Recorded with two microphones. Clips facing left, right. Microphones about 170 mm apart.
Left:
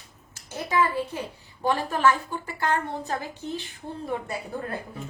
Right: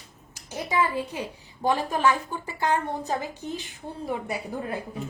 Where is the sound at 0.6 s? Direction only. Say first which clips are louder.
Left 1 dB; 15° right (ahead or behind).